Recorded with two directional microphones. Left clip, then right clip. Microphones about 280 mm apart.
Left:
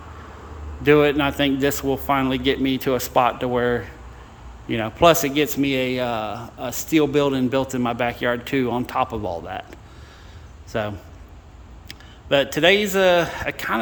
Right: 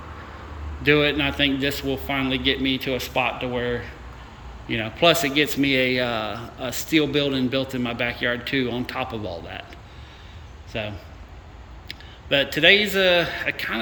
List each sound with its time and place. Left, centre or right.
0.8 s speech: centre
10.7 s a man's voice: centre